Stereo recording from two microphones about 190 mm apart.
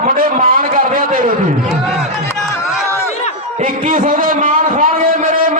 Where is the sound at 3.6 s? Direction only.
45° right (ahead or behind).